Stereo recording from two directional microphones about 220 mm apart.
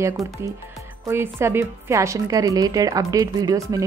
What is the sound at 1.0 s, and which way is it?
A woman's voice, 10° right (ahead or behind).